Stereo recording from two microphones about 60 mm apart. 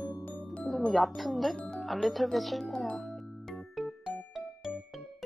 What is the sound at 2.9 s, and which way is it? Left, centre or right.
Music, centre.